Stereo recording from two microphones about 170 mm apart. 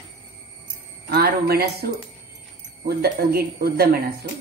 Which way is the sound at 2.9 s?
65° right (ahead or behind).